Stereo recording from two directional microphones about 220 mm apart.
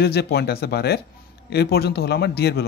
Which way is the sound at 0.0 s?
45° left (ahead or behind).